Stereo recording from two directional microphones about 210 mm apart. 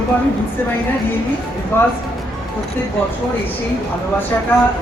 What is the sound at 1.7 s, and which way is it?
Speech, 10° left (ahead or behind).